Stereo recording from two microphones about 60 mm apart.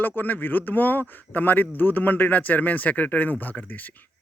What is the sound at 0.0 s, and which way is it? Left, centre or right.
A man's voice, left.